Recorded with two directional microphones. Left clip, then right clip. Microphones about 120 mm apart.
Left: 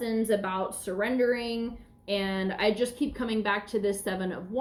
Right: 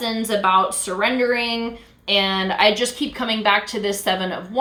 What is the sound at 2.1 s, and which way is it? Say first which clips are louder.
A woman's voice: right 12 dB; 20° right (ahead or behind).